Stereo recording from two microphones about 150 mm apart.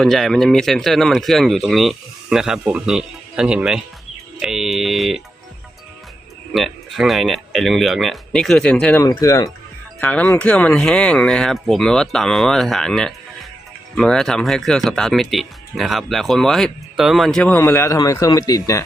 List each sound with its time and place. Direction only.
0.0 s speech: centre (ahead or behind)
6.5 s speech: centre (ahead or behind)
9.0 s speech: 20° left (ahead or behind)
10.0 s speech: 10° left (ahead or behind)
17.6 s speech: 20° left (ahead or behind)